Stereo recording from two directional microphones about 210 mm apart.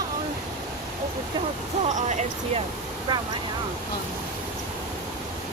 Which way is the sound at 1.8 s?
35° right (ahead or behind).